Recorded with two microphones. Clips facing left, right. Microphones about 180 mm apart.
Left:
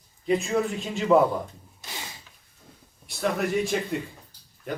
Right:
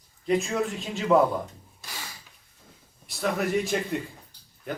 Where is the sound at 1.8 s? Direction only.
20° left (ahead or behind).